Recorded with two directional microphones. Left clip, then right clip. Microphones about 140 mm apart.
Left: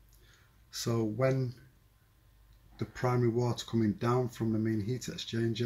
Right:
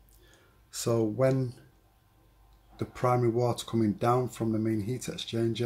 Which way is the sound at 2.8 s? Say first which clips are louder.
Right 5 dB; 10° right (ahead or behind).